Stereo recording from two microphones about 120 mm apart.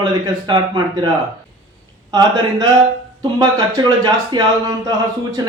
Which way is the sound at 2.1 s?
35° right (ahead or behind).